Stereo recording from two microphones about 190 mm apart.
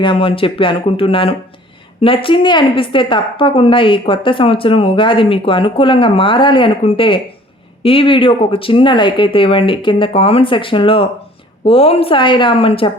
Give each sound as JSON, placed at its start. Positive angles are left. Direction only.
{"t": 0.0, "sound": "a woman's voice", "side_deg": 25}